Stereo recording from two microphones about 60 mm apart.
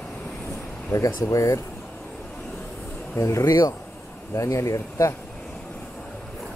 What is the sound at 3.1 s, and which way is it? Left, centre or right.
Speech, left.